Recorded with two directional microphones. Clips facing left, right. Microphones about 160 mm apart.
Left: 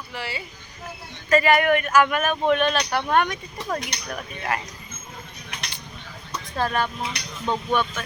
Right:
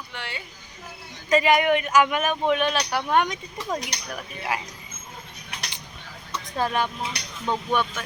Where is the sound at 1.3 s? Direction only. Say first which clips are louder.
Left 1 dB; 15° right (ahead or behind).